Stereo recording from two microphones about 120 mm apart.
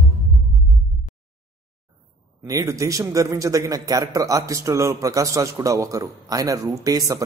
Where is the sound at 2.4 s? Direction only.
25° right (ahead or behind).